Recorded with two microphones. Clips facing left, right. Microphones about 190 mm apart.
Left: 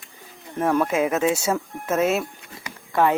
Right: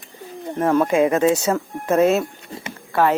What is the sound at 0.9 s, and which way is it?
Speech, 5° left (ahead or behind).